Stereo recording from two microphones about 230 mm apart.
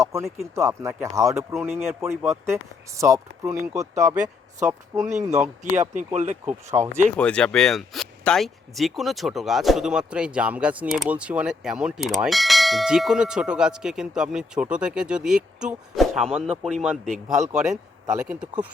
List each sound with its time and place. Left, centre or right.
0.0 s speech: centre
5.3 s speech: right
6.4 s speech: centre
7.2 s speech: centre